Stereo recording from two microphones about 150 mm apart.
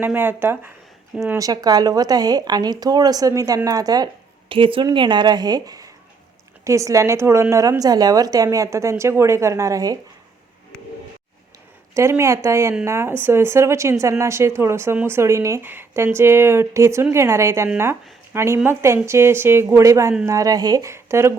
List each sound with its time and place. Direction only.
0.0 s speech: 15° right (ahead or behind)
11.9 s speech: 20° right (ahead or behind)